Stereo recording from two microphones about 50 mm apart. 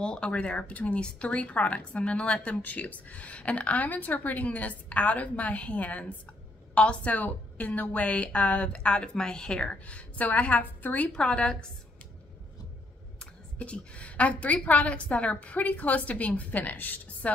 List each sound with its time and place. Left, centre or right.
0.0 s a woman's voice: centre; by 11.1 s left
11.1 s a woman's voice: centre
13.2 s a woman's voice: left